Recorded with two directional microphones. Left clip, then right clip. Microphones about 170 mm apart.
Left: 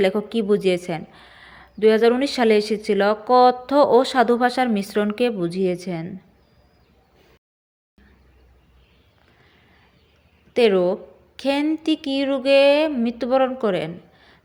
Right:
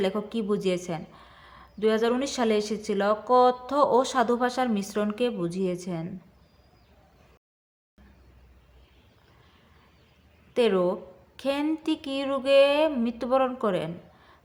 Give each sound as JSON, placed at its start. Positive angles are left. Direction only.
{"t": 0.0, "sound": "speech", "side_deg": 25}
{"t": 10.5, "sound": "speech", "side_deg": 15}